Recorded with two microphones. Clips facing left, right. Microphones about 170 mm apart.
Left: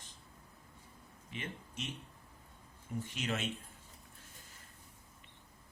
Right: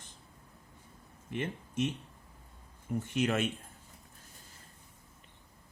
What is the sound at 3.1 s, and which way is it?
Speech, 55° right (ahead or behind).